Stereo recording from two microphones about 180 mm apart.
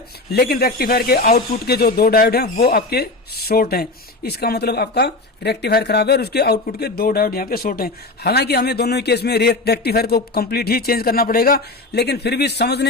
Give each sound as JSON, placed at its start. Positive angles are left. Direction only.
{"t": 0.3, "sound": "speech", "side_deg": 60}